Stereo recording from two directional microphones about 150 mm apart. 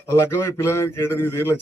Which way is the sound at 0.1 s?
20° left (ahead or behind).